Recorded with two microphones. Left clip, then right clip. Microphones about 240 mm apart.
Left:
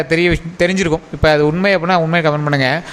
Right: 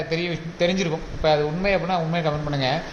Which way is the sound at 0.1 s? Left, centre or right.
Left.